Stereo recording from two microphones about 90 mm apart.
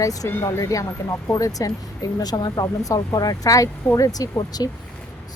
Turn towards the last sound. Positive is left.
turn(degrees=45)  # may be behind; listen again after turning